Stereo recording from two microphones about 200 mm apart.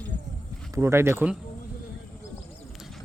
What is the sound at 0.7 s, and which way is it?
Speech, 15° right (ahead or behind).